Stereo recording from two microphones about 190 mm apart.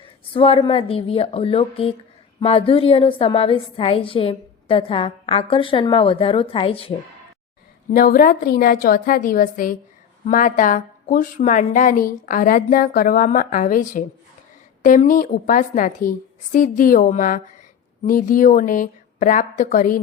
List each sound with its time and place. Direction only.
0.0 s a woman's voice: 30° left (ahead or behind)
7.9 s a woman's voice: 50° left (ahead or behind)